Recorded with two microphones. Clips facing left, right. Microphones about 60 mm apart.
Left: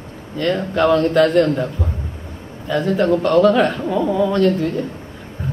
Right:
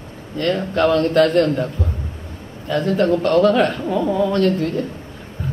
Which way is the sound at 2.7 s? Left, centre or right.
Left.